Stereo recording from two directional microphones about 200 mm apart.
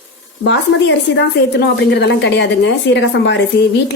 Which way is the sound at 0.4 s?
60° left (ahead or behind).